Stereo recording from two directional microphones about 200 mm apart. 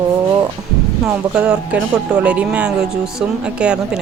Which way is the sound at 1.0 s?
5° right (ahead or behind).